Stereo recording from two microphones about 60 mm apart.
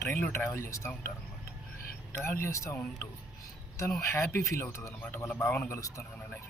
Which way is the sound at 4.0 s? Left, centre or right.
Left.